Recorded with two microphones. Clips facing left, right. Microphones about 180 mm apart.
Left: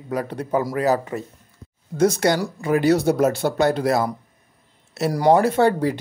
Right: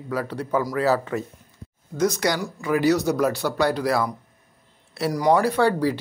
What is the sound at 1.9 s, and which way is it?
Speech, 30° left (ahead or behind).